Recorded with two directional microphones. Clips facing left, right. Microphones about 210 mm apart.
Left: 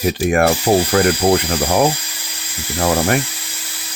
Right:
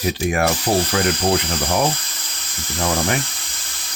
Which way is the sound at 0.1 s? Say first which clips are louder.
Left 5 dB; 55° left (ahead or behind).